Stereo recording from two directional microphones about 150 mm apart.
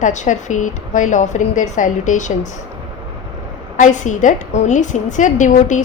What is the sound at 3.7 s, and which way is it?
A woman's voice, 55° left (ahead or behind).